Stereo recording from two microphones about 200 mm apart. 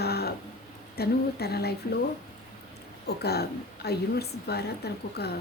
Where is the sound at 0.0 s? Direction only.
50° left (ahead or behind).